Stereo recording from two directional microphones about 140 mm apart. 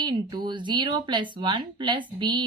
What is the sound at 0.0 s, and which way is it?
Speech, 30° right (ahead or behind).